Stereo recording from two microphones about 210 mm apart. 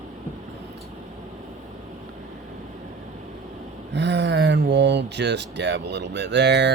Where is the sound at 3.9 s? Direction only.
55° right (ahead or behind).